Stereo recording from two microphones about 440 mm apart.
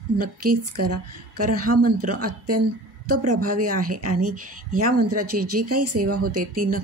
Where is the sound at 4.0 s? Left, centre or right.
Right.